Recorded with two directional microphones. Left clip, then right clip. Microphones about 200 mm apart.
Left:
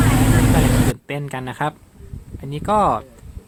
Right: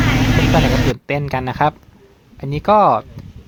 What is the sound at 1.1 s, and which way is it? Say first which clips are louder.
Speech: right 7 dB; 25° right (ahead or behind).